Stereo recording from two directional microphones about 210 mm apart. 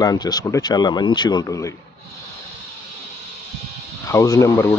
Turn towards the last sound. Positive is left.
turn(degrees=15)  # may be behind; listen again after turning